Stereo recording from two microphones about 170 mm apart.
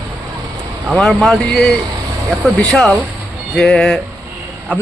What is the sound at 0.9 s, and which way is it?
A man's voice, centre (ahead or behind).